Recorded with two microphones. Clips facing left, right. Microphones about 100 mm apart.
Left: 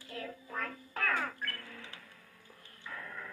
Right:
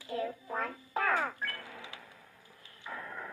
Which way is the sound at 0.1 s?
20° right (ahead or behind).